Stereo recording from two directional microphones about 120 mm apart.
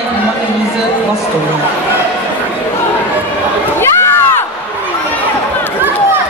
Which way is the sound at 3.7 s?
20° left (ahead or behind).